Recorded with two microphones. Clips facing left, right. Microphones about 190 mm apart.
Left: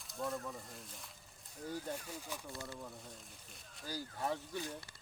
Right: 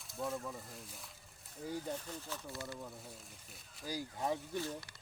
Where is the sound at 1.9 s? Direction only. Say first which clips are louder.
Right 1 dB; 10° left (ahead or behind).